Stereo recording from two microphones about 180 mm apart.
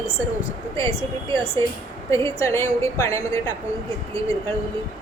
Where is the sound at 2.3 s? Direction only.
15° left (ahead or behind).